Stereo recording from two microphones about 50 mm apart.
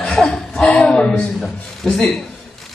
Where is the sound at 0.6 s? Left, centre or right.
Centre.